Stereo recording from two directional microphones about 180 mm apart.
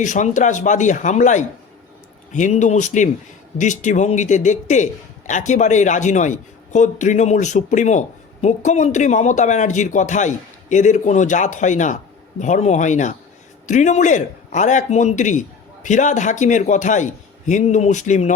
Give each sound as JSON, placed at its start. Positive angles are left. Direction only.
{"t": 0.0, "sound": "a man's voice", "side_deg": 45}